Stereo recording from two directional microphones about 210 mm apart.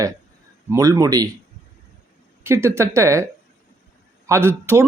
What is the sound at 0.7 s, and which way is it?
Speech, 15° right (ahead or behind).